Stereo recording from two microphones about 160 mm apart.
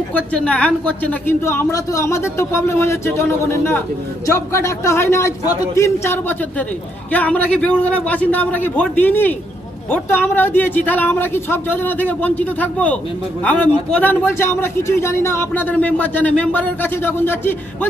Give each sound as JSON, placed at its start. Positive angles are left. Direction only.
{"t": 0.1, "sound": "a man's voice", "side_deg": 10}